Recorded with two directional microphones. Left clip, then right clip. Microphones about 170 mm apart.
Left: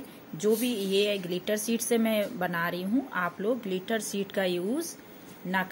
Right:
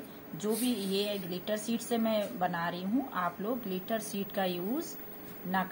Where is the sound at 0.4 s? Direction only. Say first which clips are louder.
Left 6 dB; 60° left (ahead or behind).